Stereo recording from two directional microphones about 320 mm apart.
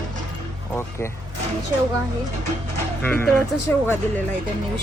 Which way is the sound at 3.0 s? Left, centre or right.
Centre.